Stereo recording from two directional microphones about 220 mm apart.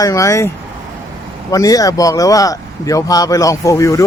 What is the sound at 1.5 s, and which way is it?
Speech, 15° left (ahead or behind).